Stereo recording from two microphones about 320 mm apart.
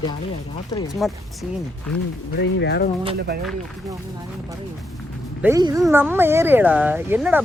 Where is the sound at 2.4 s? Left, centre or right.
Left.